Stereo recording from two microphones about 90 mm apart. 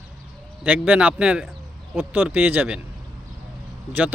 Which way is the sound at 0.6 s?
15° right (ahead or behind).